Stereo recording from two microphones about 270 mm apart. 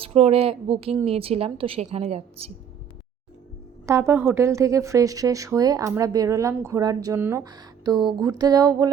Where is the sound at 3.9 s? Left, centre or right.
Centre.